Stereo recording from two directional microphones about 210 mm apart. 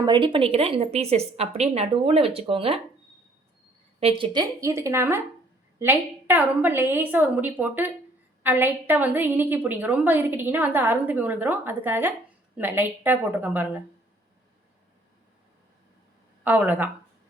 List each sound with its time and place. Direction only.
0.0 s a woman's voice: 20° right (ahead or behind)
4.0 s a woman's voice: 20° right (ahead or behind)
16.4 s a woman's voice: 10° right (ahead or behind)